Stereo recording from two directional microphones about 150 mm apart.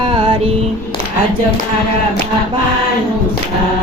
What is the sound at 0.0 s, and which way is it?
Female singing, 35° right (ahead or behind).